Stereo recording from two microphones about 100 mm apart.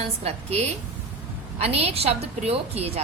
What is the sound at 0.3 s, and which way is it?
A woman's voice, 90° right.